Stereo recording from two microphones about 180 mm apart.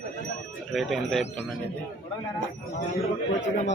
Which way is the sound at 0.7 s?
Centre (ahead or behind).